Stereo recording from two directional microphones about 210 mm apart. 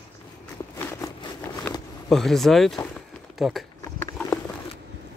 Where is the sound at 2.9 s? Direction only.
Centre (ahead or behind).